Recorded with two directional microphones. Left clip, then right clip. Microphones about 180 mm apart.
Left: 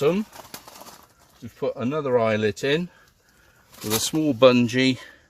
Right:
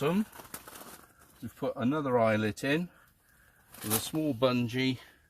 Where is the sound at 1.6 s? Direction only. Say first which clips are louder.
Left 6 dB; 35° left (ahead or behind).